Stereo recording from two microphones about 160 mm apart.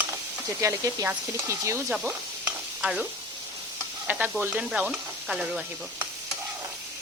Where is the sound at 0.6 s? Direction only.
20° right (ahead or behind).